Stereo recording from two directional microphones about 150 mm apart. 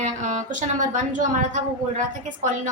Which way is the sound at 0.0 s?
60° right (ahead or behind).